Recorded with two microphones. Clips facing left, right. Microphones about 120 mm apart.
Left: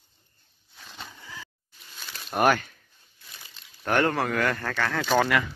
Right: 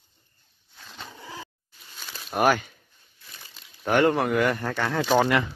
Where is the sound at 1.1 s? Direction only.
30° right (ahead or behind).